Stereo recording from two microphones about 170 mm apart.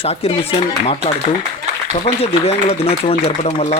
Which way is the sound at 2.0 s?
35° left (ahead or behind).